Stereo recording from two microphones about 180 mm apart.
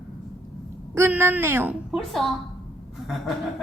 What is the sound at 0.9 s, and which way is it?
A woman's voice, 15° right (ahead or behind).